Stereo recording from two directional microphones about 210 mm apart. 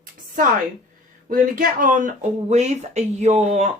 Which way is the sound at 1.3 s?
40° right (ahead or behind).